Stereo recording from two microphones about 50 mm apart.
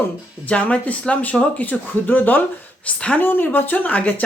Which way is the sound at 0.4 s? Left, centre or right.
Left.